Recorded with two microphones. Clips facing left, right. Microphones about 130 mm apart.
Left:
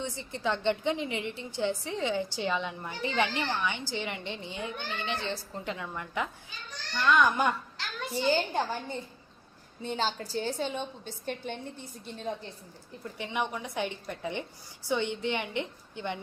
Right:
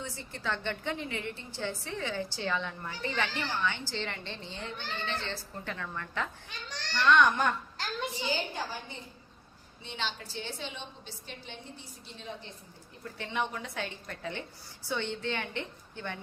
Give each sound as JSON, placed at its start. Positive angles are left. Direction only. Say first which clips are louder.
{"t": 0.0, "sound": "a woman's voice", "louder": "left 5 dB", "side_deg": 20}
{"t": 6.5, "sound": "a child's voice", "louder": "right 2 dB", "side_deg": -90}
{"t": 7.0, "sound": "a child's voice", "louder": "even", "side_deg": 5}
{"t": 7.8, "sound": "a child's voice", "louder": "right 3 dB", "side_deg": -45}
{"t": 8.3, "sound": "a woman's voice", "louder": "left 10 dB", "side_deg": 50}
{"t": 13.1, "sound": "a woman's voice", "louder": "left 1 dB", "side_deg": 15}